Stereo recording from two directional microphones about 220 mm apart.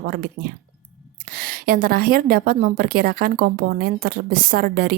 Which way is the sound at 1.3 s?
40° right (ahead or behind).